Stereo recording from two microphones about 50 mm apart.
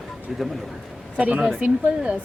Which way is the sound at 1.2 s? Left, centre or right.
Right.